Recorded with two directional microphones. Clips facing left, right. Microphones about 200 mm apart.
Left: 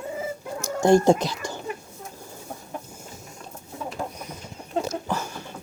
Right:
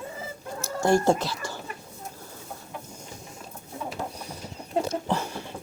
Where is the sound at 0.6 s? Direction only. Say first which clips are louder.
Left 4 dB; 15° left (ahead or behind).